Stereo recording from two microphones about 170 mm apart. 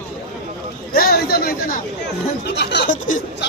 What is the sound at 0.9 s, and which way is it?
Chatter, 65° left (ahead or behind).